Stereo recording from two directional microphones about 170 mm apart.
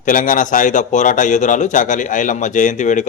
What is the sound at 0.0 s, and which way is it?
A man's voice, 50° left (ahead or behind).